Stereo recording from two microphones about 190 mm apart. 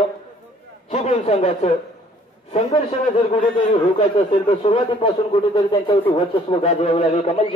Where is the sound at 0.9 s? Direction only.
35° left (ahead or behind).